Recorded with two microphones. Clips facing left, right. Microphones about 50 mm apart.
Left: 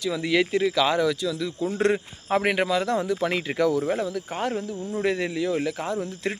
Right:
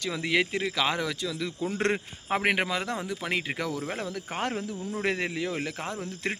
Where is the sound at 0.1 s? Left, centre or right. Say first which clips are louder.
Left 4 dB; right.